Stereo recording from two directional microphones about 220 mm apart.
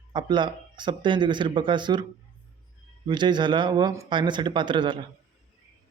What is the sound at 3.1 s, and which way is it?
A man's voice, 20° right (ahead or behind).